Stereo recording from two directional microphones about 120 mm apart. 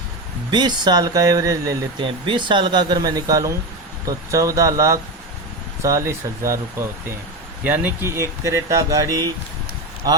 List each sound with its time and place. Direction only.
0.5 s speech: 35° right (ahead or behind)
2.0 s speech: 45° right (ahead or behind)